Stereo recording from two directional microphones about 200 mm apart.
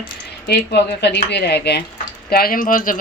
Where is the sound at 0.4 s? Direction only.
55° left (ahead or behind).